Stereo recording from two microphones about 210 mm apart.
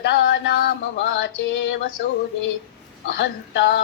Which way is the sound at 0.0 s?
60° left (ahead or behind).